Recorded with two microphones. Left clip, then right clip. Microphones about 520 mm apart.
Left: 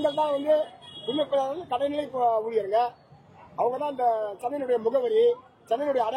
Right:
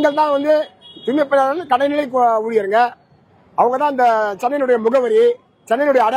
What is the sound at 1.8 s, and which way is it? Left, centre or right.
Speech, right.